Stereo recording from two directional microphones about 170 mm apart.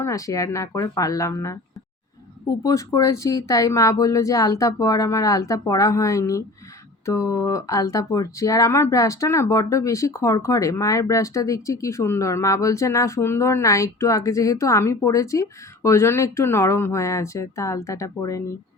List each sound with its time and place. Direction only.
0.0 s speech: 20° left (ahead or behind)